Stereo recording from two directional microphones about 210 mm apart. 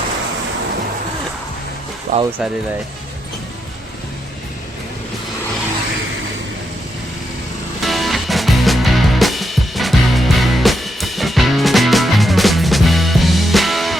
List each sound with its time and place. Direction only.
2.1 s speech: 40° right (ahead or behind)
7.8 s music: centre (ahead or behind)